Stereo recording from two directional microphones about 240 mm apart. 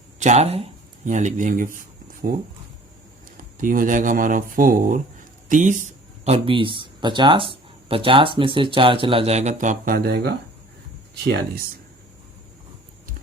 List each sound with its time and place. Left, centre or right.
0.2 s speech: right